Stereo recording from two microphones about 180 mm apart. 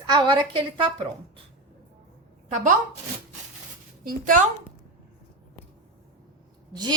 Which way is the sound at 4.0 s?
50° right (ahead or behind).